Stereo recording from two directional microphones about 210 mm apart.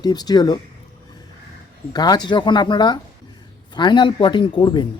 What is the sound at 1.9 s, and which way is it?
Speech, 20° left (ahead or behind).